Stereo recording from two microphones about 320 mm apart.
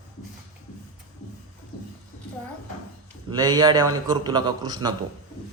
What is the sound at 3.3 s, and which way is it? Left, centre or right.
A man's voice, centre.